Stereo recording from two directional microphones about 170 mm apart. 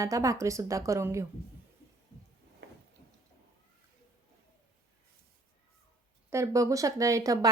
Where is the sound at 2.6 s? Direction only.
80° right.